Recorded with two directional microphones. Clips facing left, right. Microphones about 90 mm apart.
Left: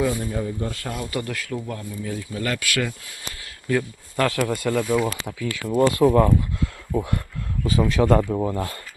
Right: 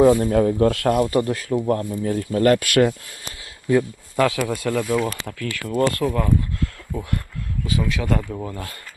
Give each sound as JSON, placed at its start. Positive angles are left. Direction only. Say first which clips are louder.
{"t": 0.0, "sound": "speech", "louder": "right 9 dB", "side_deg": -50}
{"t": 1.0, "sound": "speech", "louder": "right 8 dB", "side_deg": -35}
{"t": 1.6, "sound": "speech", "louder": "right 9 dB", "side_deg": -45}
{"t": 4.2, "sound": "speech", "louder": "right 2 dB", "side_deg": -5}
{"t": 6.1, "sound": "speech", "louder": "left 6 dB", "side_deg": 30}
{"t": 6.6, "sound": "a sound", "louder": "left 3 dB", "side_deg": 20}
{"t": 7.6, "sound": "speech", "louder": "left 5 dB", "side_deg": 35}